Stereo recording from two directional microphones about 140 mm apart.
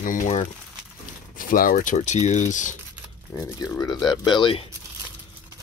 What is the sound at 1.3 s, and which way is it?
Speech, 85° left.